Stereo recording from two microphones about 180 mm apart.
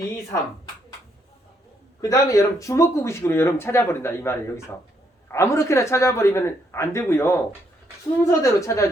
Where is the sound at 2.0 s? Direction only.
20° left (ahead or behind).